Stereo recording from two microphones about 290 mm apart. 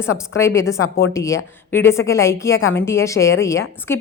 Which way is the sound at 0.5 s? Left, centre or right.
Left.